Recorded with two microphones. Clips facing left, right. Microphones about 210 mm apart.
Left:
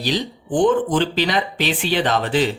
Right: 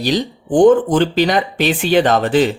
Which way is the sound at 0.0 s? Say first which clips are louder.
Right 5 dB; 45° right (ahead or behind).